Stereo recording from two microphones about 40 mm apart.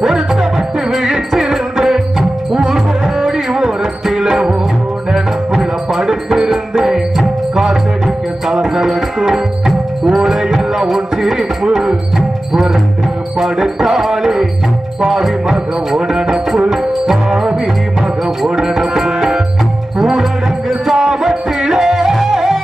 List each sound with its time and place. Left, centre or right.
0.0 s music: centre
8.5 s tabla: centre
10.0 s music: centre
18.8 s music: centre